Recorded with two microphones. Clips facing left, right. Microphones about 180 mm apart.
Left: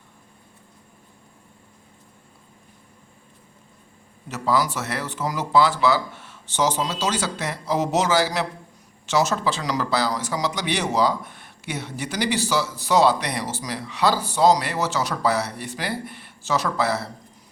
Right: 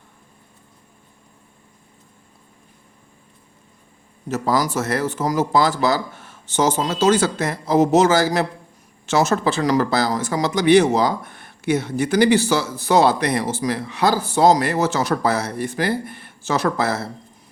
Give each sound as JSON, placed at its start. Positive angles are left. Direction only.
{"t": 4.3, "sound": "speech", "side_deg": -45}